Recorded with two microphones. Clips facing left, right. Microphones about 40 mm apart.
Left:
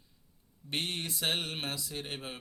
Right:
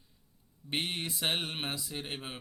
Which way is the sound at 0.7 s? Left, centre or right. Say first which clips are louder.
Right 1 dB; centre.